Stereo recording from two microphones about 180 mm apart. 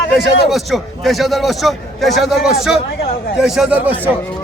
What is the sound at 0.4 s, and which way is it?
A man's voice, centre (ahead or behind).